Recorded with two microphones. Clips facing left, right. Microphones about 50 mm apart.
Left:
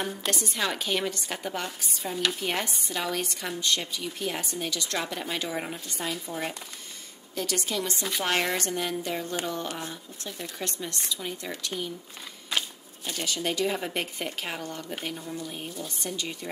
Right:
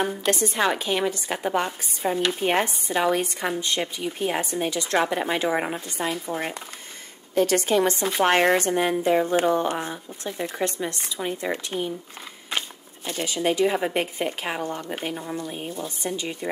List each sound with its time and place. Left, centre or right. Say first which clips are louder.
0.7 s speech: right 4 dB; centre
1.5 s speech: right 8 dB; right
7.3 s speech: right 10 dB; right
8.5 s speech: right 8 dB; right